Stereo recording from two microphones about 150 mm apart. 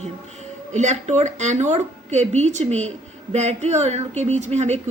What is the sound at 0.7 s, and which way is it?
A woman's voice, 50° right (ahead or behind).